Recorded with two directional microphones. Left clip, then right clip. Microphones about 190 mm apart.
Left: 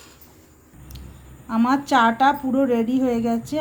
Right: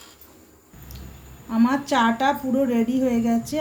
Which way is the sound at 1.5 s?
55° left (ahead or behind).